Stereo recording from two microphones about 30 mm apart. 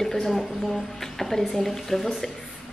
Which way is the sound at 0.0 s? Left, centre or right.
Centre.